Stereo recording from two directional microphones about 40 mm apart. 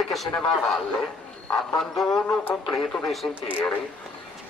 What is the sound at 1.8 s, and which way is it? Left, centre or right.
Speech, centre.